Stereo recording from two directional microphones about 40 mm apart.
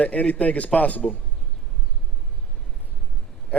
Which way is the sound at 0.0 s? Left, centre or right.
Left.